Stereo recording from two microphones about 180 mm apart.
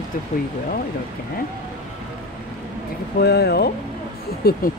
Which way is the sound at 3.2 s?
65° left (ahead or behind).